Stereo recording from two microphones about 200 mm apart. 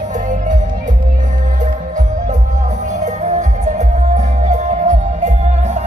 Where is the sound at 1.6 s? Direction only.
40° right (ahead or behind).